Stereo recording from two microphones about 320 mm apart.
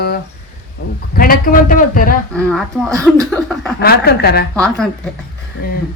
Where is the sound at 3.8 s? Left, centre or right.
Left.